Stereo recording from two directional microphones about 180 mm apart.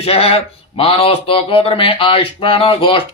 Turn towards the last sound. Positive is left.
turn(degrees=30)  # may be behind; listen again after turning